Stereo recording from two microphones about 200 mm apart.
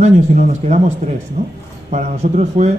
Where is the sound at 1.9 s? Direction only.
35° right (ahead or behind).